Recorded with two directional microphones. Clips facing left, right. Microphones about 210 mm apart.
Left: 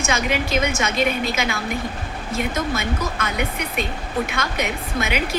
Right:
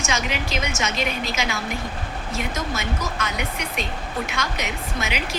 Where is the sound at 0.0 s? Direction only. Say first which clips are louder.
Left 4 dB; 55° left (ahead or behind).